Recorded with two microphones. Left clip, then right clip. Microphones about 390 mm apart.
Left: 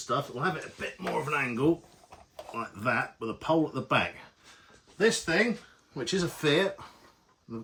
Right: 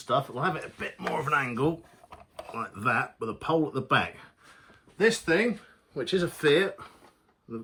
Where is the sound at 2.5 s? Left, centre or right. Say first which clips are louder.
Right 2 dB; centre.